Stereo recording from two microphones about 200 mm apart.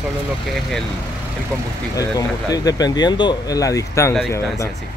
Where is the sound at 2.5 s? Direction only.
20° left (ahead or behind).